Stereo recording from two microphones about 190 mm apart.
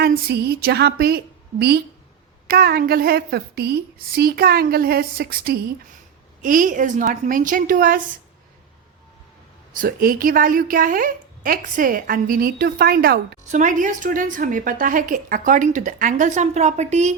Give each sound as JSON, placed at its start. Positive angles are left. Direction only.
{"t": 0.0, "sound": "a woman's voice", "side_deg": -55}
{"t": 9.7, "sound": "a woman's voice", "side_deg": -50}
{"t": 13.4, "sound": "a woman's voice", "side_deg": -40}